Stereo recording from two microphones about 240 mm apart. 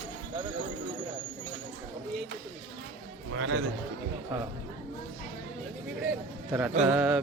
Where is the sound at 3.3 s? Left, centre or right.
Right.